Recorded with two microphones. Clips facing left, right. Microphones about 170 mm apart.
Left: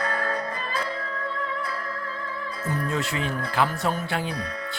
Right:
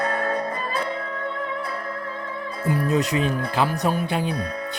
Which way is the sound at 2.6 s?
15° right (ahead or behind).